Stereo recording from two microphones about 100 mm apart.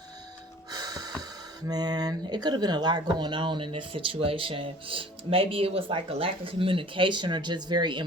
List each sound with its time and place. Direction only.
0.7 s music: 40° right (ahead or behind)
1.7 s speech: 40° right (ahead or behind)